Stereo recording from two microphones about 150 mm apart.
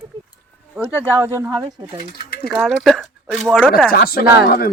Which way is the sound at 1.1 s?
15° right (ahead or behind).